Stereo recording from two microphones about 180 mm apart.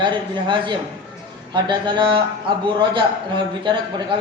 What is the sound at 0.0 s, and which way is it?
A man's voice, 25° right (ahead or behind).